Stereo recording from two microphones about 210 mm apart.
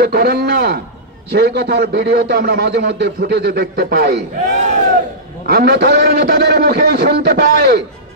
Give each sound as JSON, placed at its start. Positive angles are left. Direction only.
{"t": 0.0, "sound": "a man's voice", "side_deg": -45}
{"t": 4.5, "sound": "speech", "side_deg": -35}
{"t": 5.5, "sound": "a man's voice", "side_deg": -50}